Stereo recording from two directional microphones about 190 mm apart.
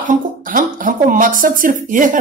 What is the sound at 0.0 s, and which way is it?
A woman's voice, 45° right (ahead or behind).